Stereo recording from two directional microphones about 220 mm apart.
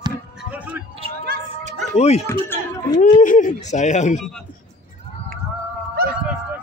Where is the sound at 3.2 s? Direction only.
35° left (ahead or behind).